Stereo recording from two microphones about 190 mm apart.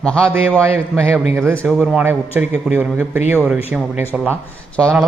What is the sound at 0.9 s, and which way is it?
Speech, 15° right (ahead or behind).